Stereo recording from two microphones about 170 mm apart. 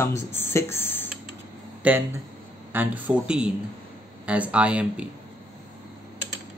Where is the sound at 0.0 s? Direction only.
15° left (ahead or behind).